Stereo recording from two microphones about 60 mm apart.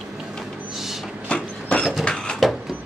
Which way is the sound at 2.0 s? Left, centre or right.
Centre.